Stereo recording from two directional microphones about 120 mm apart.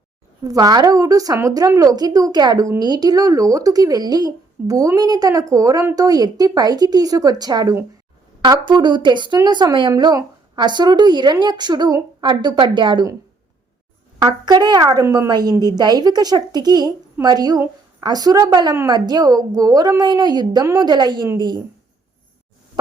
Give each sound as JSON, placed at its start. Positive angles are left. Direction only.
{"t": 0.4, "sound": "a woman's voice", "side_deg": -30}
{"t": 14.4, "sound": "a woman's voice", "side_deg": -35}
{"t": 15.0, "sound": "a woman's voice", "side_deg": -25}
{"t": 15.3, "sound": "a woman's voice", "side_deg": -35}